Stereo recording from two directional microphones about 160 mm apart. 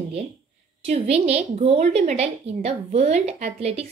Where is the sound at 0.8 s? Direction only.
40° right (ahead or behind).